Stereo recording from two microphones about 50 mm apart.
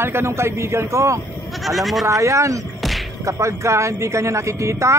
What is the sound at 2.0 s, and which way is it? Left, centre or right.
Speech, right.